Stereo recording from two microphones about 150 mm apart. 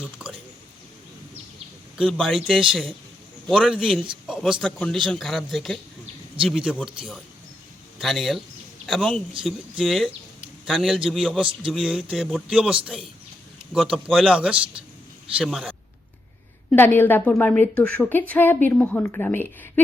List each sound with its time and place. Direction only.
0.2 s a sound: 5° right (ahead or behind)
2.0 s a man's voice: 5° left (ahead or behind)
8.0 s speech: centre (ahead or behind)
11.3 s a man's voice: 35° right (ahead or behind)
11.7 s speech: centre (ahead or behind)
16.6 s a woman's voice: 15° left (ahead or behind)